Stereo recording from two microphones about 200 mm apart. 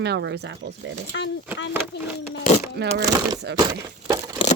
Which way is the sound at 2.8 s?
55° right (ahead or behind).